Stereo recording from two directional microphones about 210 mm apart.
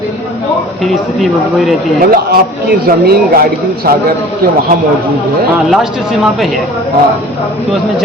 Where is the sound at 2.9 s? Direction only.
45° right (ahead or behind).